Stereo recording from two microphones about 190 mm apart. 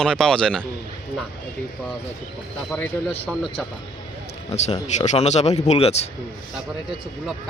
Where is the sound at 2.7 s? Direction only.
5° left (ahead or behind).